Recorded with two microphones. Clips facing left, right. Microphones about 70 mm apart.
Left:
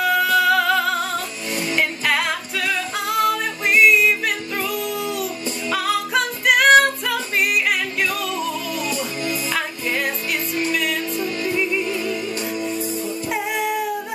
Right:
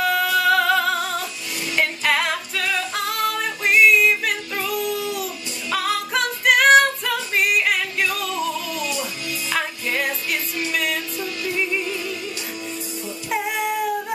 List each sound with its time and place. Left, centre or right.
0.0 s music: centre
11.1 s music: left
13.3 s music: centre